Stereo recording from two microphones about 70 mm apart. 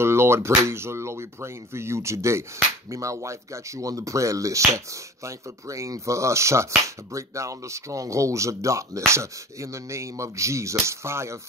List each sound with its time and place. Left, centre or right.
0.0 s speech: right